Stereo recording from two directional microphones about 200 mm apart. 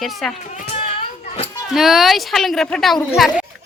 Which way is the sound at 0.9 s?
30° left (ahead or behind).